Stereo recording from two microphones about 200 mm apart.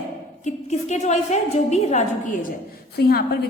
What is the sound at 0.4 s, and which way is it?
A woman's voice, 35° left (ahead or behind).